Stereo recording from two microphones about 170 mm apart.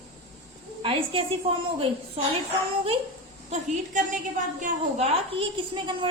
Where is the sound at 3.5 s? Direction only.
45° right (ahead or behind).